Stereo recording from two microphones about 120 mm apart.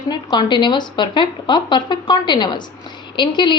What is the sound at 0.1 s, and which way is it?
A woman's voice, 35° left (ahead or behind).